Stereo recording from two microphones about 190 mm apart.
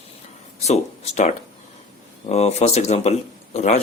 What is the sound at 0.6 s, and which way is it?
Speech, 35° left (ahead or behind).